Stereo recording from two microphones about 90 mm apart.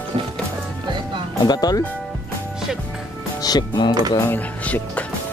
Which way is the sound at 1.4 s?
50° left (ahead or behind).